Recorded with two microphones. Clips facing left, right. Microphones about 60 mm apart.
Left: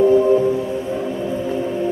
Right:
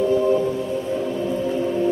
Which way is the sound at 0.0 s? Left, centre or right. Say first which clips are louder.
Left 5 dB; left.